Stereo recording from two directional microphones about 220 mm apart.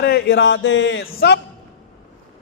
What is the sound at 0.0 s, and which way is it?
A man's voice, 50° left (ahead or behind).